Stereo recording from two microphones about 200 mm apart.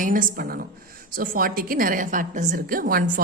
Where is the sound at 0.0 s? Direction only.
45° right (ahead or behind).